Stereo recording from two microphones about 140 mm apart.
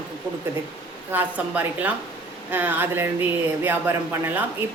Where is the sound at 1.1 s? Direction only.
10° right (ahead or behind).